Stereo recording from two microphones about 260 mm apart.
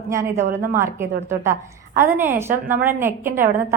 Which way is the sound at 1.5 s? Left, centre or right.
Centre.